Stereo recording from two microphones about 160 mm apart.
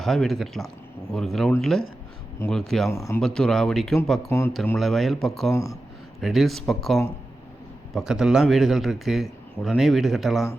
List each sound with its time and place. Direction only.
0.0 s a man's voice: centre (ahead or behind)
2.9 s speech: 20° left (ahead or behind)
3.2 s a man's voice: 5° left (ahead or behind)
4.3 s speech: 15° left (ahead or behind)
4.8 s a man's voice: centre (ahead or behind)